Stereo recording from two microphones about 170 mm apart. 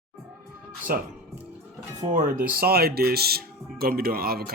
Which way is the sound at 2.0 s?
50° right (ahead or behind).